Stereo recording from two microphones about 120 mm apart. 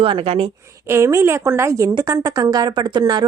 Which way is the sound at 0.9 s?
25° right (ahead or behind).